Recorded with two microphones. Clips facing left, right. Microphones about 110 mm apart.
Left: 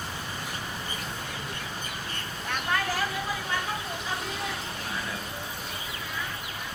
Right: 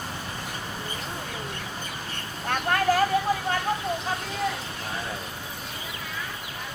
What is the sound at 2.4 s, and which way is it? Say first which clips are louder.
Vehicle: right 6 dB; 50° right (ahead or behind).